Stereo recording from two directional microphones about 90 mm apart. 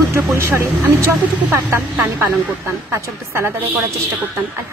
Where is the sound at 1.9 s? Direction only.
20° right (ahead or behind).